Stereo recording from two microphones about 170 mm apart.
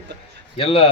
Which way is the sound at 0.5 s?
35° left (ahead or behind).